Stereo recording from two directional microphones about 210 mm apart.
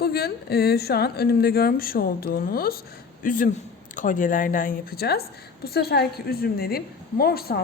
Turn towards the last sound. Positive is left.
turn(degrees=45)  # may be behind; listen again after turning